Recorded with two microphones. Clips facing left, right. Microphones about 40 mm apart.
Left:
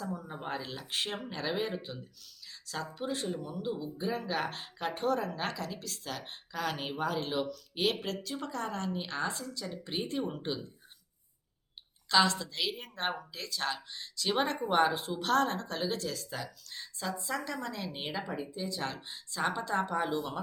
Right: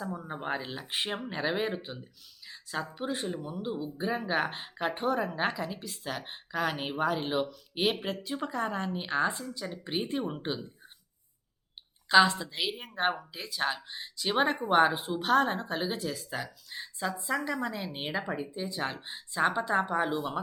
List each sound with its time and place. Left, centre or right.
0.0 s speech: right
12.0 s speech: right